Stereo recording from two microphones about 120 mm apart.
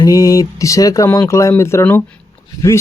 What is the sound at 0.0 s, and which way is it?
Speech, 30° left (ahead or behind).